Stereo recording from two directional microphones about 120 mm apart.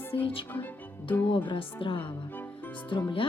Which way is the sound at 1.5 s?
45° left (ahead or behind).